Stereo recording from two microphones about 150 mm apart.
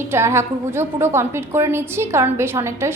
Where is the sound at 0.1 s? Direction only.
15° right (ahead or behind).